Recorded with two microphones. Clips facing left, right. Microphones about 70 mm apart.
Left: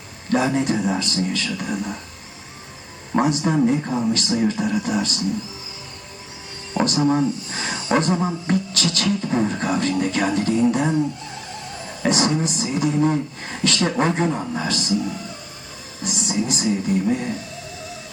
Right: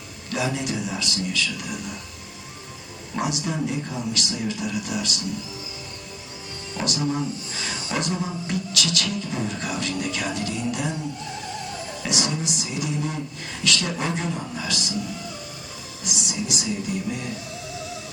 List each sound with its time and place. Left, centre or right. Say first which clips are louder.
0.3 s speech: left 7 dB; left
3.2 s speech: left 8 dB; left
6.7 s speech: left 7 dB; left
12.0 s speech: left 8 dB; left
16.0 s speech: left 6 dB; left